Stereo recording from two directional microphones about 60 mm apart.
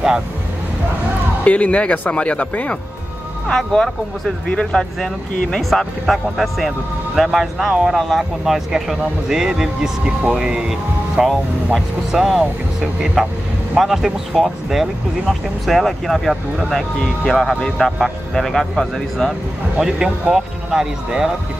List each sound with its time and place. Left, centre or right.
1.4 s speech: left
3.4 s speech: centre
19.8 s speech: centre